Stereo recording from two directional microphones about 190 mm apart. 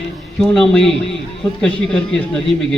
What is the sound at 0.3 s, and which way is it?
A man's voice, 5° left (ahead or behind).